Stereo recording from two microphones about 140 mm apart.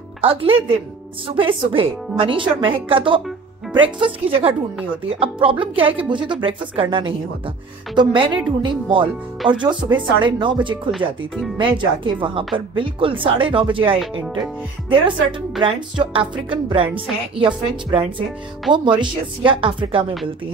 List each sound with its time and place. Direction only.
0.2 s a woman's voice: 40° right (ahead or behind)
15.6 s a woman's voice: 35° right (ahead or behind)